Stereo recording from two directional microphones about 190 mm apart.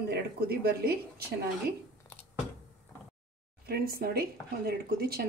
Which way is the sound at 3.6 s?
55° right (ahead or behind).